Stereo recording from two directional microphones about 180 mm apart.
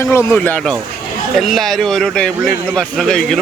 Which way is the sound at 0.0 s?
15° left (ahead or behind).